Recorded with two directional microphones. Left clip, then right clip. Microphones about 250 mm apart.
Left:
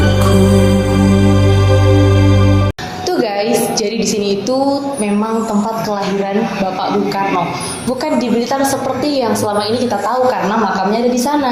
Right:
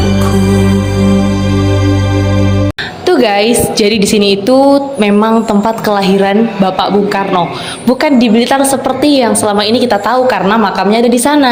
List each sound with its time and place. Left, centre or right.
3.1 s a sound: right
4.1 s a woman's voice: right
8.0 s a woman's voice: right